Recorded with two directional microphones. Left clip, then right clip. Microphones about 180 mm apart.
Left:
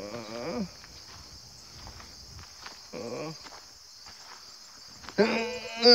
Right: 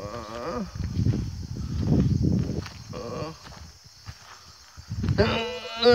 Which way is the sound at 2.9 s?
Centre (ahead or behind).